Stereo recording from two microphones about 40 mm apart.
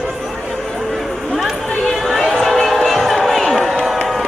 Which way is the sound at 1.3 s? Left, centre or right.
Centre.